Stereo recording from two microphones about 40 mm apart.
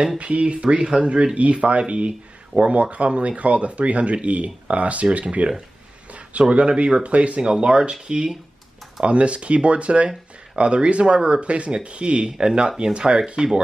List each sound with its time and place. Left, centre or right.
0.2 s speech: right
6.5 s speech: right
9.0 s speech: right